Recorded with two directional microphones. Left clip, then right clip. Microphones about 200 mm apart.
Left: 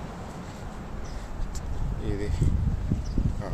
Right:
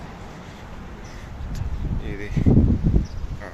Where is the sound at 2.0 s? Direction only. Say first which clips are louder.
Even; 20° left (ahead or behind).